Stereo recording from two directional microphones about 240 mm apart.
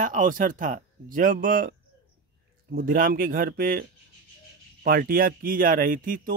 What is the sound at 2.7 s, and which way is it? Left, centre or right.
A man's voice, right.